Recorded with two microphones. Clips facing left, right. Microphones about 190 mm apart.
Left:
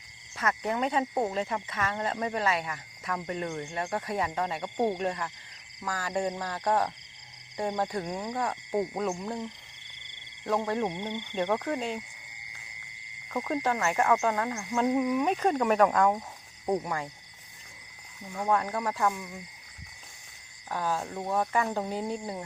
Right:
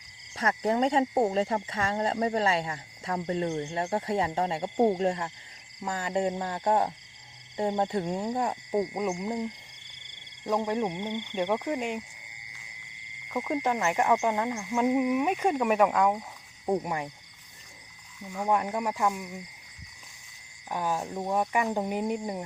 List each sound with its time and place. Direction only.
0.3 s speech: 30° right (ahead or behind)
13.2 s speech: 15° right (ahead or behind)
16.8 s speech: 20° right (ahead or behind)
18.4 s speech: 15° right (ahead or behind)
20.7 s speech: 15° right (ahead or behind)